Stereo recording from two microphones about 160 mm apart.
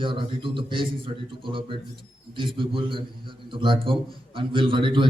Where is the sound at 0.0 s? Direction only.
30° right (ahead or behind).